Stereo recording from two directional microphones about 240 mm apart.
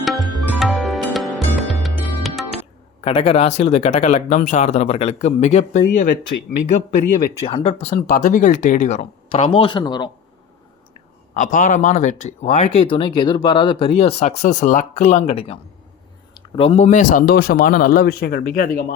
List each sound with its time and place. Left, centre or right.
0.0 s music: centre
3.0 s speech: left
7.4 s speech: left
11.3 s speech: left